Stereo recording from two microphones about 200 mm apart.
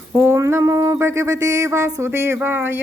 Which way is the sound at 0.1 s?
15° right (ahead or behind).